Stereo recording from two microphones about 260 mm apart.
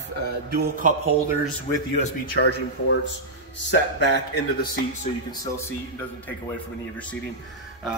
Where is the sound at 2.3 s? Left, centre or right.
Left.